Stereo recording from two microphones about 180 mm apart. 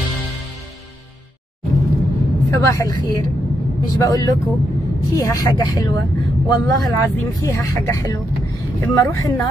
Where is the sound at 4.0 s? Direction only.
20° left (ahead or behind).